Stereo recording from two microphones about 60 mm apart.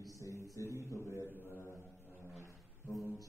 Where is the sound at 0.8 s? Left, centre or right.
Left.